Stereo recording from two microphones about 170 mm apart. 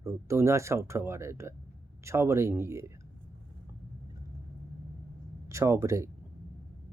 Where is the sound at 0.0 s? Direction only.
15° right (ahead or behind).